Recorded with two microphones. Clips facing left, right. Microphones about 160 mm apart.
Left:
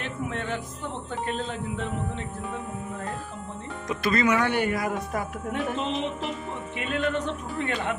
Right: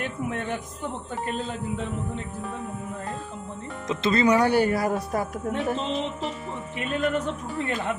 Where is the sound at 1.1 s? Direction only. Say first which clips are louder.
Left 1 dB; 5° right (ahead or behind).